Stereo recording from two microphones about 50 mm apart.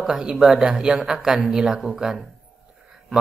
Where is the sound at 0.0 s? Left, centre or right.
Centre.